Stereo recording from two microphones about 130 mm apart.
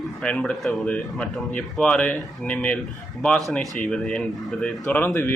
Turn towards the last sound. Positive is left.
turn(degrees=15)  # may be behind; listen again after turning